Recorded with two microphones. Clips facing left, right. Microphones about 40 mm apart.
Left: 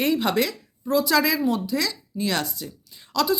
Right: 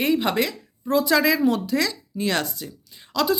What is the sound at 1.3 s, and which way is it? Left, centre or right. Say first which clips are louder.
Speech: right 3 dB; right.